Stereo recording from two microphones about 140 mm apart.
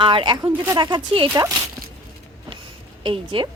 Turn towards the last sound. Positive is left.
turn(degrees=-35)  # may be behind; listen again after turning